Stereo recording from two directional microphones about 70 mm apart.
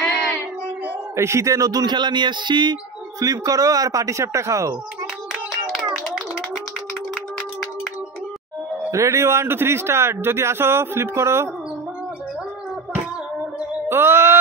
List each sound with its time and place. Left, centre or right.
0.8 s music: right
3.2 s speech: right
5.7 s clapping: centre
8.9 s speech: right
13.8 s mantra: right